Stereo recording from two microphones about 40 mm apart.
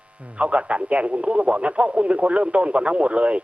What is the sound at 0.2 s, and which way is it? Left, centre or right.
Speech, right.